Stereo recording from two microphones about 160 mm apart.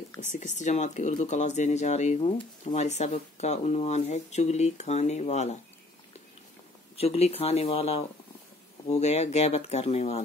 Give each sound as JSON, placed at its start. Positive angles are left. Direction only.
{"t": 0.2, "sound": "speech", "side_deg": 45}
{"t": 7.0, "sound": "speech", "side_deg": 40}